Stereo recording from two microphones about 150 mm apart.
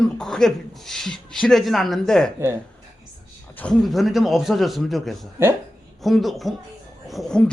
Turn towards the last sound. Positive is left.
turn(degrees=5)  # may be behind; listen again after turning